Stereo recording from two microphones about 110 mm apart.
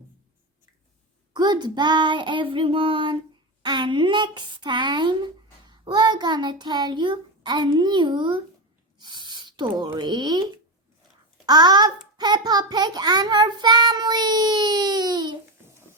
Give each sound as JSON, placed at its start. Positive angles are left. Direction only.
{"t": 1.3, "sound": "speech", "side_deg": -40}
{"t": 11.4, "sound": "a child's voice", "side_deg": -40}